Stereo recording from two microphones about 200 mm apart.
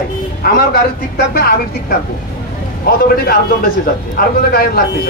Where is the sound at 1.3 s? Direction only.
50° left (ahead or behind).